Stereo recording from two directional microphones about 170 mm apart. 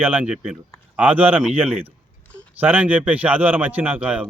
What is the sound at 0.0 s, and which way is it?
Speech, 10° right (ahead or behind).